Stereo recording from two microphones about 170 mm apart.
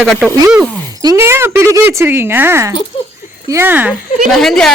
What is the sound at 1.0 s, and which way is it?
Speech, 15° right (ahead or behind).